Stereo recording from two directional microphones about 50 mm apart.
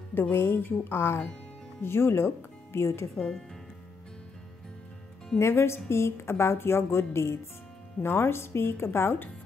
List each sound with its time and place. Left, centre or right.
0.1 s a woman's voice: left
5.4 s a woman's voice: left